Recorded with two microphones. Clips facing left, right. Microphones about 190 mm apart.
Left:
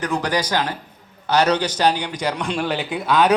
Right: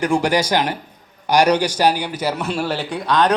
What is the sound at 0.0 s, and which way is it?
A man's voice, 10° right (ahead or behind).